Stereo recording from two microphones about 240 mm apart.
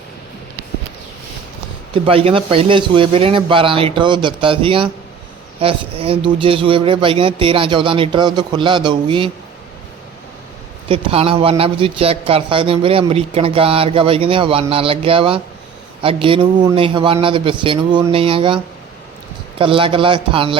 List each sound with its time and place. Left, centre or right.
1.9 s a man's voice: right
10.8 s a man's voice: right